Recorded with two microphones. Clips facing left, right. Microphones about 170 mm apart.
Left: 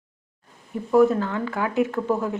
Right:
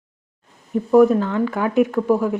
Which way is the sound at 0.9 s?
15° right (ahead or behind).